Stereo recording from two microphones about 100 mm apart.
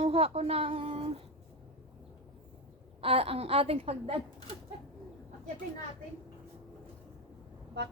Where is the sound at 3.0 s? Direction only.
75° right (ahead or behind).